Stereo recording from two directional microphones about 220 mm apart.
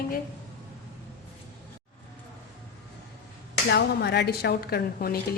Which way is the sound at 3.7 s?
50° left (ahead or behind).